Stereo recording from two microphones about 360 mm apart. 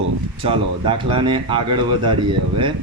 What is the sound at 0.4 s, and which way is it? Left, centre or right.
Speech, centre.